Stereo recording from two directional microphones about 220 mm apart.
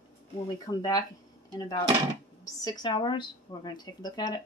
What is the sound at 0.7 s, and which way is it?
Speech, 15° left (ahead or behind).